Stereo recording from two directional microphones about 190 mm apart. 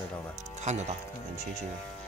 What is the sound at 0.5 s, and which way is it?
Speech, 35° right (ahead or behind).